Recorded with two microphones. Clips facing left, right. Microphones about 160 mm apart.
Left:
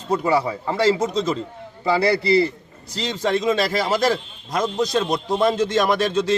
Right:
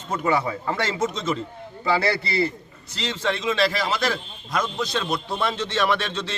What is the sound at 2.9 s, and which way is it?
A man's voice, 35° left (ahead or behind).